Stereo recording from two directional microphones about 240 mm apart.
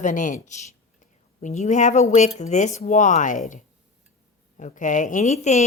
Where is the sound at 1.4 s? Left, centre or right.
Left.